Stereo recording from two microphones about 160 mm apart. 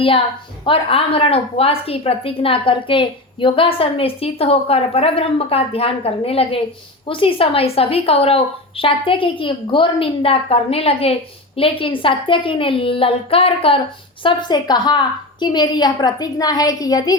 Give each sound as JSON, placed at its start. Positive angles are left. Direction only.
{"t": 0.6, "sound": "a woman's voice", "side_deg": 35}